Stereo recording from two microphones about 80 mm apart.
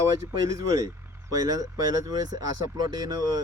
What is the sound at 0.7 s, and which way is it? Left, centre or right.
Speech, right.